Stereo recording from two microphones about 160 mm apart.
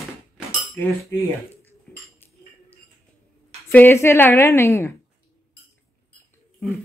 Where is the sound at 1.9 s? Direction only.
10° left (ahead or behind).